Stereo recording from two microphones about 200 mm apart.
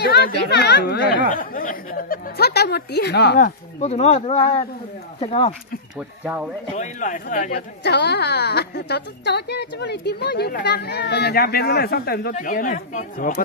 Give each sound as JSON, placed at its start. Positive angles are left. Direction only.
{"t": 0.0, "sound": "speech", "side_deg": 55}
{"t": 1.3, "sound": "speech", "side_deg": 40}
{"t": 3.3, "sound": "speech", "side_deg": 40}
{"t": 5.9, "sound": "speech", "side_deg": -5}
{"t": 6.8, "sound": "speech", "side_deg": 40}